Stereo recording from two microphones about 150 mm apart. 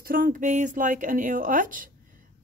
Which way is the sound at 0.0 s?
70° right (ahead or behind).